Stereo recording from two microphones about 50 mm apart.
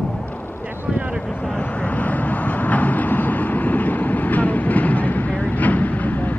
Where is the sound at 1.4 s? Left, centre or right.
Left.